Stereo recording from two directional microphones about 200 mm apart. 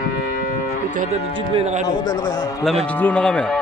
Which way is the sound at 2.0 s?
20° left (ahead or behind).